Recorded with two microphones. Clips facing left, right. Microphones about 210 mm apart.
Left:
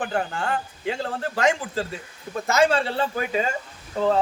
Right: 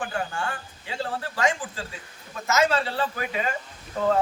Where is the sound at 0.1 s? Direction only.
40° left (ahead or behind).